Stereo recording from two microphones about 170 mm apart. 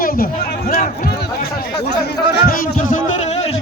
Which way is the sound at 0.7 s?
40° left (ahead or behind).